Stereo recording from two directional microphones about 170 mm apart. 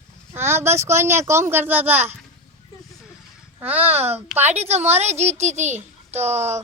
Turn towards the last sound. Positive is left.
turn(degrees=-40)  # may be behind; listen again after turning